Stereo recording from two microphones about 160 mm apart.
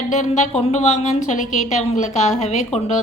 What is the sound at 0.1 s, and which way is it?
A woman's voice, 50° left (ahead or behind).